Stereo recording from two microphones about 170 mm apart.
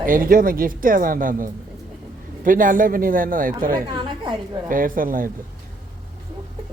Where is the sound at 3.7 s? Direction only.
25° right (ahead or behind).